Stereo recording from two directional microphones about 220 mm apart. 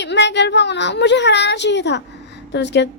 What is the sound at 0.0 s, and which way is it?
A woman's voice, 50° left (ahead or behind).